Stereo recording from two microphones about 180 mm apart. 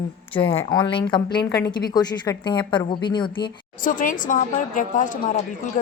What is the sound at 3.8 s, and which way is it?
Speech, 50° left (ahead or behind).